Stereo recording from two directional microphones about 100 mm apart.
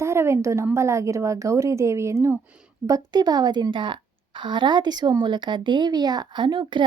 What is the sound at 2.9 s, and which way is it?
A woman's voice, 40° right (ahead or behind).